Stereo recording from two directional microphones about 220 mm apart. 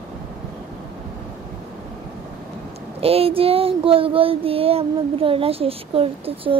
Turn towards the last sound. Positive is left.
turn(degrees=-25)  # may be behind; listen again after turning